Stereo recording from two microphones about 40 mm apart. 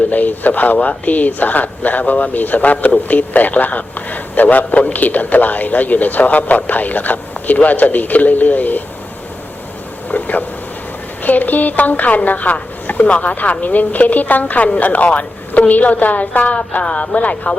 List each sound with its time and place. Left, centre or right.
0.1 s a man's voice: left
10.1 s a sound: left
11.2 s a man's voice: left
16.8 s a woman's voice: left